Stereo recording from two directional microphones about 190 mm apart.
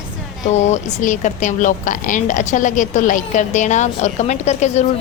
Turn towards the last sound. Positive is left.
turn(degrees=35)  # may be behind; listen again after turning